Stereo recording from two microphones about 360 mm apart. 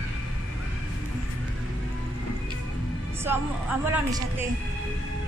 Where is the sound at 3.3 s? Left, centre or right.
Centre.